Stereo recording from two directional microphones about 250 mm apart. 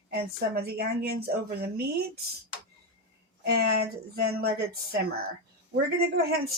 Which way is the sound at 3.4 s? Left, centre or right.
Right.